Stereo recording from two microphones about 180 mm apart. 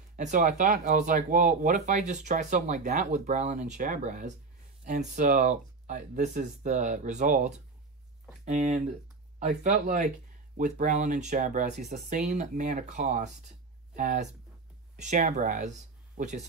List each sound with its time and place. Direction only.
0.1 s speech: 45° right (ahead or behind)